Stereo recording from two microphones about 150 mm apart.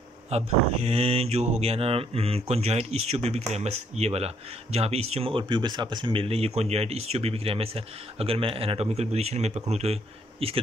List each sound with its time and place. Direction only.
0.3 s speech: 45° right (ahead or behind)
5.4 s speech: 30° right (ahead or behind)